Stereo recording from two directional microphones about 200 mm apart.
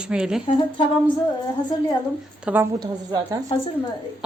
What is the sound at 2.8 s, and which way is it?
Speech, 20° right (ahead or behind).